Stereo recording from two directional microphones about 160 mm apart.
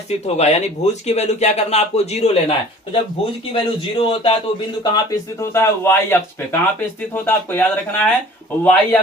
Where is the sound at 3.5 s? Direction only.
35° left (ahead or behind).